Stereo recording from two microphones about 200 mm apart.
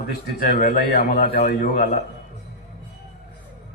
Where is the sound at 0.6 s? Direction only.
45° left (ahead or behind).